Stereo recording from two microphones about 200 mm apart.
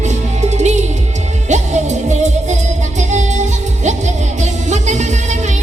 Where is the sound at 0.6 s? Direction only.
35° right (ahead or behind).